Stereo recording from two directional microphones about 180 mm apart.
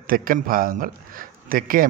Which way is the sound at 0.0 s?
50° right (ahead or behind).